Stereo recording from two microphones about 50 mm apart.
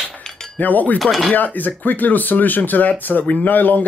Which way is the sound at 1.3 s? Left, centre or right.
Left.